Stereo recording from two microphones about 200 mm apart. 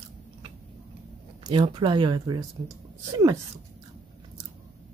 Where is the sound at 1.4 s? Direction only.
25° right (ahead or behind).